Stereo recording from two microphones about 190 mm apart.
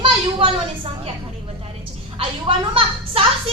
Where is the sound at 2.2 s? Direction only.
30° right (ahead or behind).